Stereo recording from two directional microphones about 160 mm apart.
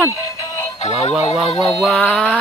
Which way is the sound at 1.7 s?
5° left (ahead or behind).